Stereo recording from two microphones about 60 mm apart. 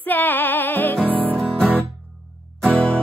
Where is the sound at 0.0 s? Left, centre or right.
Left.